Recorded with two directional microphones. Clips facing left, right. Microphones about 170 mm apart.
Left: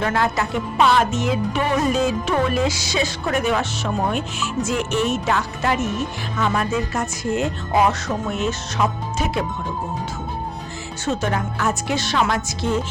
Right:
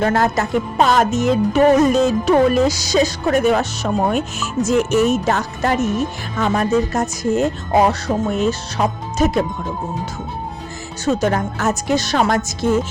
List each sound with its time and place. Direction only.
0.0 s music: 40° right (ahead or behind)
11.0 s music: 40° right (ahead or behind)